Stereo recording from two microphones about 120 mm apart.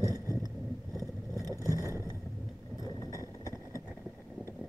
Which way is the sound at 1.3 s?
30° right (ahead or behind).